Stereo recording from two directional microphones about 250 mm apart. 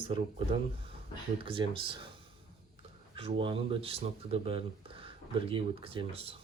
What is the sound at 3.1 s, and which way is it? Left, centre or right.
Speech, right.